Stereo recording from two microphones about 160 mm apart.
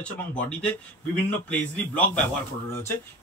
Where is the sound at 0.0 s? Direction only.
5° left (ahead or behind).